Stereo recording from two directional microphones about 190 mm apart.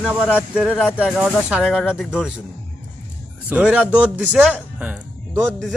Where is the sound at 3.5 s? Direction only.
5° right (ahead or behind).